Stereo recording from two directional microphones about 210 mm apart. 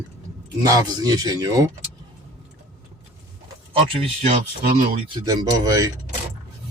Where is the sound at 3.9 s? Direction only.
30° right (ahead or behind).